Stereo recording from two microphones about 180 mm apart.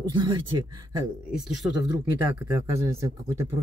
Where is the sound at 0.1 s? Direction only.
25° right (ahead or behind).